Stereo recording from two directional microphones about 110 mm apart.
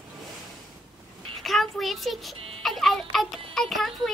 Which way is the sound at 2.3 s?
60° right (ahead or behind).